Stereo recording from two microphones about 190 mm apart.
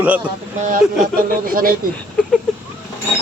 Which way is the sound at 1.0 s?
50° right (ahead or behind).